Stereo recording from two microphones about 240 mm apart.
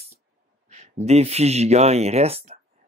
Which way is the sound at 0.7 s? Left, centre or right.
Right.